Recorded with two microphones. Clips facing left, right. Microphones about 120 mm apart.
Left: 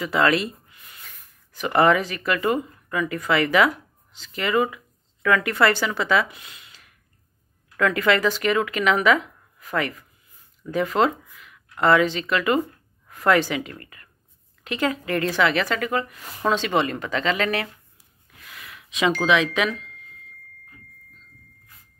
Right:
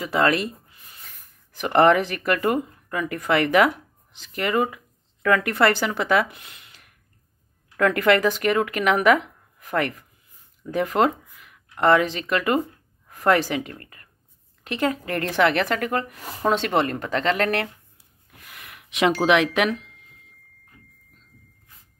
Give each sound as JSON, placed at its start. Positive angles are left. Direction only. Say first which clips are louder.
{"t": 0.0, "sound": "speech", "louder": "even", "side_deg": -45}
{"t": 1.6, "sound": "speech", "louder": "right 2 dB", "side_deg": -50}
{"t": 18.3, "sound": "a sound", "louder": "left 1 dB", "side_deg": -50}